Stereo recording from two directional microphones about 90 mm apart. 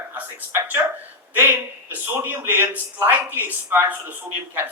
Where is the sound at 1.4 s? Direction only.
20° right (ahead or behind).